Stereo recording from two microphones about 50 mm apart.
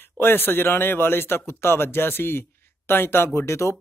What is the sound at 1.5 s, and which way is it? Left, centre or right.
Speech, left.